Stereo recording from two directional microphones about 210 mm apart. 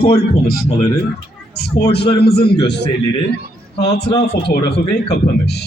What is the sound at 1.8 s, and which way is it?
Speech, 50° left (ahead or behind).